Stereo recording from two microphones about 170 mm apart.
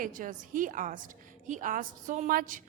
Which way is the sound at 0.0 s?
55° right (ahead or behind).